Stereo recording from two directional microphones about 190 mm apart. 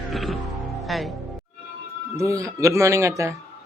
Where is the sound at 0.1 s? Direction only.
Centre (ahead or behind).